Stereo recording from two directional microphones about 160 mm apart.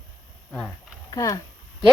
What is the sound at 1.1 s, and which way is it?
Speech, 20° left (ahead or behind).